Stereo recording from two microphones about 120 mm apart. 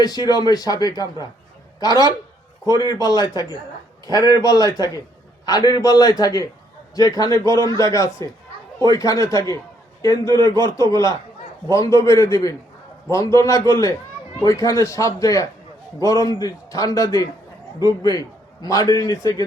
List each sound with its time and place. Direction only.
0.0 s a man's voice: 35° left (ahead or behind)